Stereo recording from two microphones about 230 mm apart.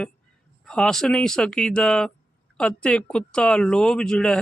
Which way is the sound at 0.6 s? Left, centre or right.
Centre.